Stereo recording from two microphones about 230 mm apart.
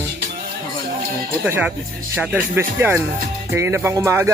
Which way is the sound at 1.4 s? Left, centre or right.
Centre.